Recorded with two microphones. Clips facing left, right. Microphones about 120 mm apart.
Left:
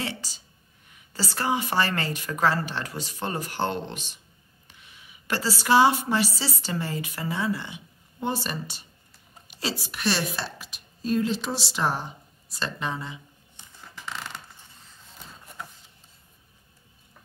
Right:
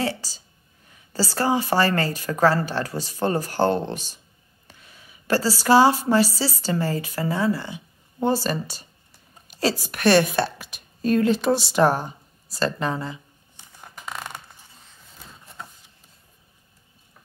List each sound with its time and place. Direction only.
0.0 s a woman's voice: 35° right (ahead or behind)